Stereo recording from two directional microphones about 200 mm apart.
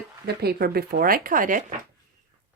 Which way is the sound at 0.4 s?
50° right (ahead or behind).